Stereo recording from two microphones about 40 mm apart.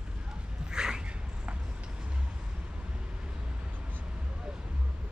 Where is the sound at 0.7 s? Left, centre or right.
Centre.